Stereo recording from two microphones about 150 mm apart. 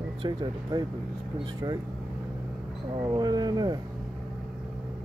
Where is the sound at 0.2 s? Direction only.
30° right (ahead or behind).